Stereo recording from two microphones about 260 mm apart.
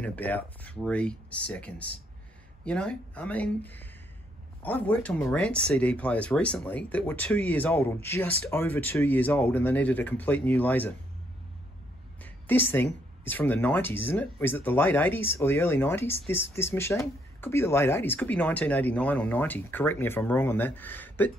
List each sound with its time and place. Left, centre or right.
0.0 s speech: centre
12.2 s speech: centre